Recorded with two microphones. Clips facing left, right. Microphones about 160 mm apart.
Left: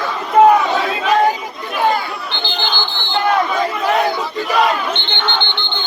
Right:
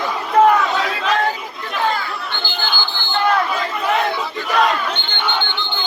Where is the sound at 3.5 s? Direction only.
Centre (ahead or behind).